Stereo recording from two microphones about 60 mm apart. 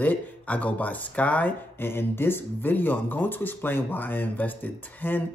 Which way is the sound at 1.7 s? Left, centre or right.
Left.